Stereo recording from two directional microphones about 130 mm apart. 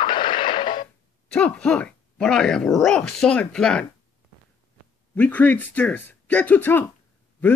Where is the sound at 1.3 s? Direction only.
10° left (ahead or behind).